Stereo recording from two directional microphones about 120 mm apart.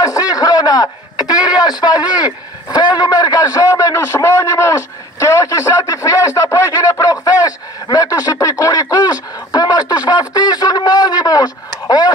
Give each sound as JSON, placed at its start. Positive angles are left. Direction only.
{"t": 0.0, "sound": "speech", "side_deg": 30}